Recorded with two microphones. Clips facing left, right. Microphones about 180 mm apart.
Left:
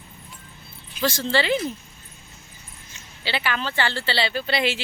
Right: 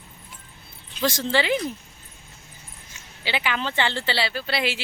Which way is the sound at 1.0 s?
15° right (ahead or behind).